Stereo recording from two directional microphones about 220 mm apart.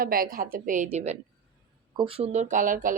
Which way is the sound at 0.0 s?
40° right (ahead or behind).